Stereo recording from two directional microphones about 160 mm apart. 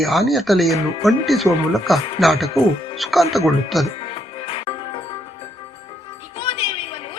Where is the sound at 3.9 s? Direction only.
35° left (ahead or behind).